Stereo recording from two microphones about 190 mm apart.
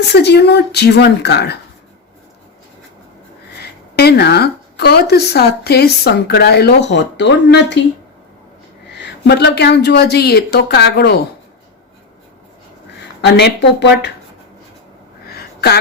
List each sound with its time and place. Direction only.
0.1 s a woman's voice: 60° left (ahead or behind)
3.9 s a woman's voice: 60° left (ahead or behind)
9.0 s a woman's voice: 65° left (ahead or behind)
13.2 s a woman's voice: 65° left (ahead or behind)
15.3 s a sound: 55° left (ahead or behind)